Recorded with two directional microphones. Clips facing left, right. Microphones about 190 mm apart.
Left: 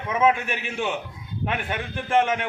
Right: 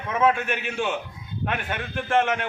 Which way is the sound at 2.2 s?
15° left (ahead or behind).